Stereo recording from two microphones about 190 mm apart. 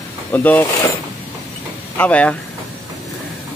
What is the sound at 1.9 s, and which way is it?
Speech, 5° left (ahead or behind).